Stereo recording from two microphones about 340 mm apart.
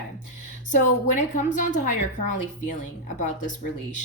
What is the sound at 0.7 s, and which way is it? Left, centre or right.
A woman's voice, left.